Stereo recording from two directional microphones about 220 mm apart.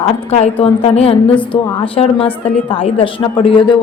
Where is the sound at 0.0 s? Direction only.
30° left (ahead or behind).